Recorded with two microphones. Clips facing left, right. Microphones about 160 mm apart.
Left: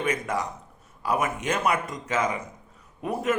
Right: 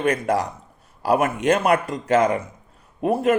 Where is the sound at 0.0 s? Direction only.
65° right (ahead or behind).